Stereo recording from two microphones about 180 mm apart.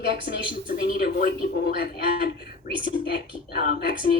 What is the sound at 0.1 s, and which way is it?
Speech, 55° left (ahead or behind).